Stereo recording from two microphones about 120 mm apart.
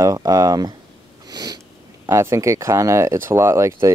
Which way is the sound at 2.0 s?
25° right (ahead or behind).